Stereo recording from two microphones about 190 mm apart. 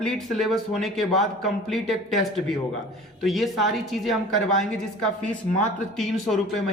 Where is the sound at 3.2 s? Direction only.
Centre (ahead or behind).